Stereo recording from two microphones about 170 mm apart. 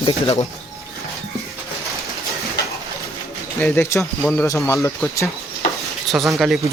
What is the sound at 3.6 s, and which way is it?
Speech, 15° left (ahead or behind).